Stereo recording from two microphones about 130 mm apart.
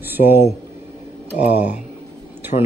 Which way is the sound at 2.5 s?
85° left.